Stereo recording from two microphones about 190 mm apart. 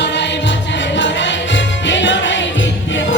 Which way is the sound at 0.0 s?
65° left (ahead or behind).